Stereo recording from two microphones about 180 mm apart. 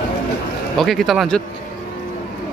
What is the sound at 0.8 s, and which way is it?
Speech, centre (ahead or behind).